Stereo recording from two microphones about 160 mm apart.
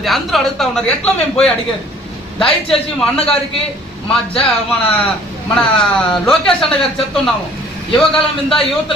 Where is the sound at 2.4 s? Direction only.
5° left (ahead or behind).